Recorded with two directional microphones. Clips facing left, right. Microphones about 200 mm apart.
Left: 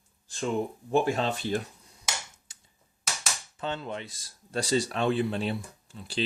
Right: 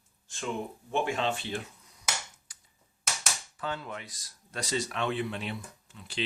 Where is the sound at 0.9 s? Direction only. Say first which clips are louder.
Left 4 dB; 35° left (ahead or behind).